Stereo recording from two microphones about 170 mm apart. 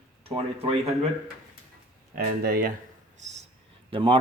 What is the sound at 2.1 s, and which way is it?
Speech, 60° right (ahead or behind).